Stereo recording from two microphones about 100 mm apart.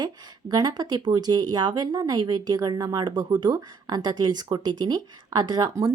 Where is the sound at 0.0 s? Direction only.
40° right (ahead or behind).